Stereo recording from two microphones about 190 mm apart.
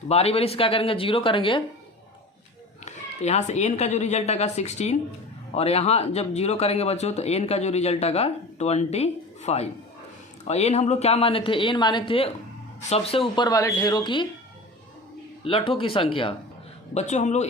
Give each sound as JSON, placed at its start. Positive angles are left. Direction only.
{"t": 0.1, "sound": "speech", "side_deg": 30}
{"t": 2.8, "sound": "speech", "side_deg": 35}
{"t": 15.4, "sound": "speech", "side_deg": 30}